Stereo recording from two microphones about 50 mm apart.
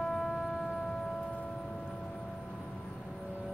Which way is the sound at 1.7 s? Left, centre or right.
Centre.